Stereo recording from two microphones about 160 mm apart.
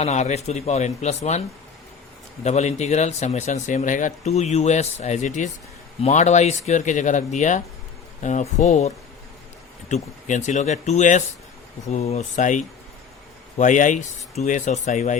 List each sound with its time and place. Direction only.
0.0 s speech: 45° left (ahead or behind)
9.9 s speech: 50° left (ahead or behind)